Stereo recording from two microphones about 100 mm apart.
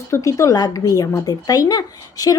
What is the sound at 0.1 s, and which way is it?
Speech, 30° left (ahead or behind).